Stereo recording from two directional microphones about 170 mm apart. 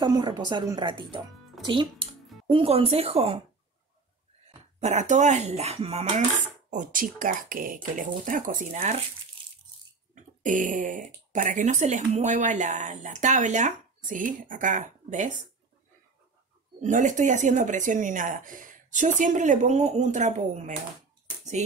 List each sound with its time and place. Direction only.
0.0 s speech: 25° right (ahead or behind)
4.7 s speech: 45° right (ahead or behind)
6.7 s speech: 50° right (ahead or behind)
10.4 s speech: 50° right (ahead or behind)
16.8 s speech: 45° right (ahead or behind)